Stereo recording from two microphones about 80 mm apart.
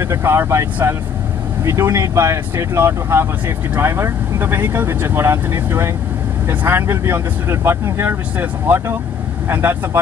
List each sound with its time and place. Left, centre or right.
0.0 s speech: right